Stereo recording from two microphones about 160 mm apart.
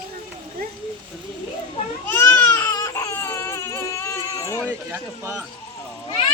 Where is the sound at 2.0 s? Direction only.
15° left (ahead or behind).